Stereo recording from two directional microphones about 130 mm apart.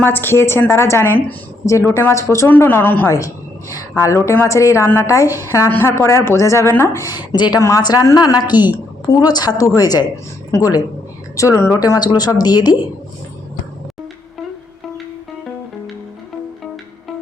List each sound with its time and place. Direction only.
0.0 s a woman's voice: 15° left (ahead or behind); by 12.7 s 30° left (ahead or behind)